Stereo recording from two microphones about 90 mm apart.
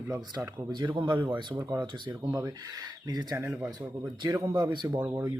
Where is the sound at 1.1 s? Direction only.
20° right (ahead or behind).